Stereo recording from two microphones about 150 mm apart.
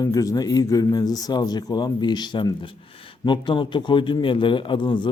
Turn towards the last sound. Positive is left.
turn(degrees=30)  # may be behind; listen again after turning